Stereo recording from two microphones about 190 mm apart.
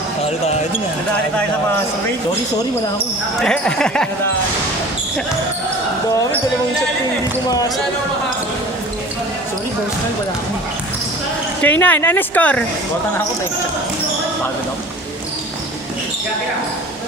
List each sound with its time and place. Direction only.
3.4 s speech: 5° left (ahead or behind)
7.4 s speech: 20° left (ahead or behind)
11.6 s a woman's voice: 10° left (ahead or behind)